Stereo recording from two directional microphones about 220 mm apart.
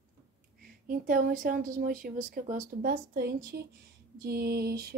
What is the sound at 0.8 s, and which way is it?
A woman's voice, 40° right (ahead or behind).